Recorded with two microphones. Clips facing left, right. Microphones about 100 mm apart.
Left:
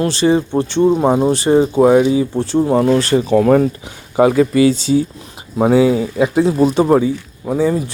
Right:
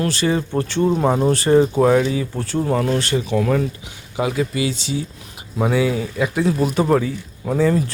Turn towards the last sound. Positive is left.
turn(degrees=15)  # may be behind; listen again after turning